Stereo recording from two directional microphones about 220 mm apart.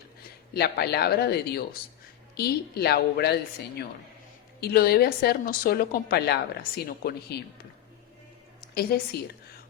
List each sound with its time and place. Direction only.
0.5 s a woman's voice: 45° left (ahead or behind)
4.6 s a woman's voice: 45° left (ahead or behind)
8.7 s a woman's voice: 45° left (ahead or behind)